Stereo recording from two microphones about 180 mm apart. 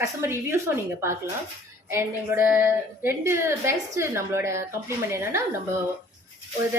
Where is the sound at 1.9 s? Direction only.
10° right (ahead or behind).